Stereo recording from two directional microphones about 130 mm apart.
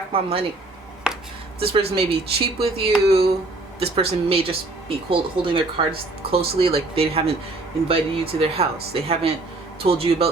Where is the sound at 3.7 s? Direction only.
45° right (ahead or behind).